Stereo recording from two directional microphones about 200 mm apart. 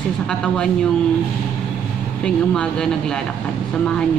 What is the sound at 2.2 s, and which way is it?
A woman's voice, 5° left (ahead or behind).